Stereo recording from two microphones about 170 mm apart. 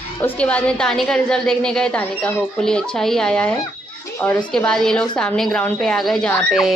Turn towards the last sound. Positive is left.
turn(degrees=0)  # may be behind; listen again after turning